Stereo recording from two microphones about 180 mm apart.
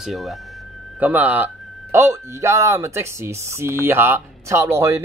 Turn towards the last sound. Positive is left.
turn(degrees=-15)  # may be behind; listen again after turning